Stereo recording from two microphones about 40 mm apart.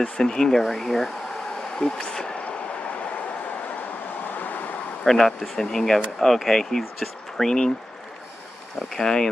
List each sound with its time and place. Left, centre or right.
0.0 s speech: centre
4.3 s vehicle: left
5.0 s speech: centre
8.9 s speech: centre